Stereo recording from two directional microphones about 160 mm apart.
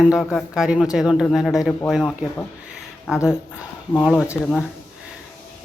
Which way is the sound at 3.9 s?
5° left (ahead or behind).